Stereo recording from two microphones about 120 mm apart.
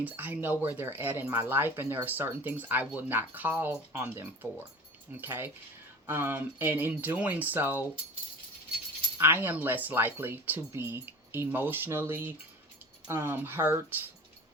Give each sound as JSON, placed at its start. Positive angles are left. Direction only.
{"t": 0.0, "sound": "speech", "side_deg": -15}
{"t": 9.2, "sound": "speech", "side_deg": -20}